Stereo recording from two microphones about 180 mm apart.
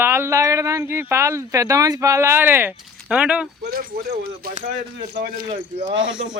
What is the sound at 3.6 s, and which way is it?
Speech, 55° right (ahead or behind).